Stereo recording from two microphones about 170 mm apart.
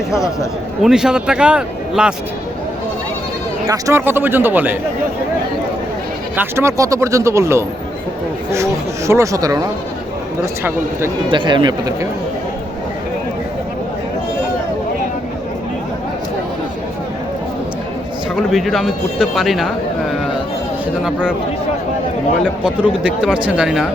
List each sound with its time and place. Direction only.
0.8 s speech: 5° right (ahead or behind)
3.7 s speech: 15° right (ahead or behind)
6.3 s speech: 15° right (ahead or behind)
11.3 s speech: 30° right (ahead or behind)
18.5 s speech: centre (ahead or behind)
22.4 s speech: 5° right (ahead or behind)